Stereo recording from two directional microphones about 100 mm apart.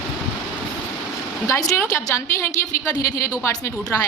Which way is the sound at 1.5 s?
30° left (ahead or behind).